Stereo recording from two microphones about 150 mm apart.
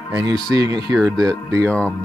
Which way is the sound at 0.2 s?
25° right (ahead or behind).